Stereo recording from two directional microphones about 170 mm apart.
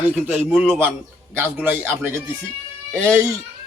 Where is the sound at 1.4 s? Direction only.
10° right (ahead or behind).